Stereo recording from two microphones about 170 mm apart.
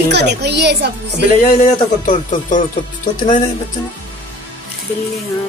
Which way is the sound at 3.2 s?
45° left (ahead or behind).